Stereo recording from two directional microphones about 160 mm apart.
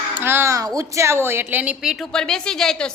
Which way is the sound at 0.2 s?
15° right (ahead or behind).